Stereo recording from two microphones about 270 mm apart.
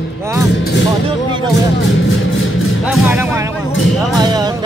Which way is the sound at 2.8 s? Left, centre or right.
Centre.